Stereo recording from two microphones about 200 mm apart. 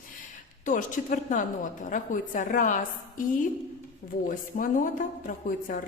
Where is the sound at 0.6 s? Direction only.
40° left (ahead or behind).